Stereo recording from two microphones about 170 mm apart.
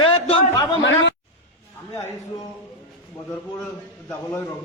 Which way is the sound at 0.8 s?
90° left.